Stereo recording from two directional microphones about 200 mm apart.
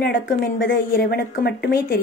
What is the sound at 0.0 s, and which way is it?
Speech, 60° left (ahead or behind).